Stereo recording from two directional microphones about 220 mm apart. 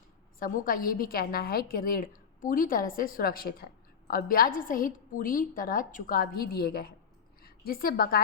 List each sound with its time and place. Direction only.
0.3 s a woman's voice: 40° left (ahead or behind)